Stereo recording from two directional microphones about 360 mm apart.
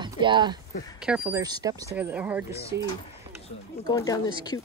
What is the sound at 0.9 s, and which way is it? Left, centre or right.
Speech, centre.